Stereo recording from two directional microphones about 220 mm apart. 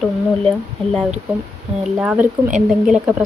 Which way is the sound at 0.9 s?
Centre (ahead or behind).